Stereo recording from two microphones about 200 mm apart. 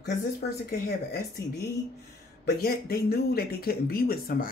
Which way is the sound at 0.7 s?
50° left (ahead or behind).